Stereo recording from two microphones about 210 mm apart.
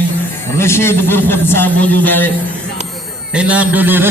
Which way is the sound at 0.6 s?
10° left (ahead or behind).